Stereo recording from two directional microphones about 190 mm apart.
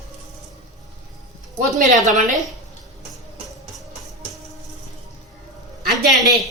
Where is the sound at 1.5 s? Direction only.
40° right (ahead or behind).